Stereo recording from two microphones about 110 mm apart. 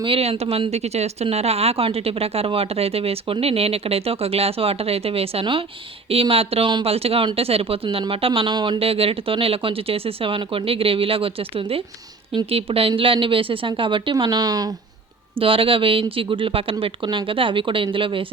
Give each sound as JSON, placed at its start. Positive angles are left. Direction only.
{"t": 0.0, "sound": "a woman's voice", "side_deg": -60}
{"t": 8.8, "sound": "a woman's voice", "side_deg": -60}
{"t": 14.3, "sound": "speech", "side_deg": -35}
{"t": 15.4, "sound": "a woman's voice", "side_deg": -55}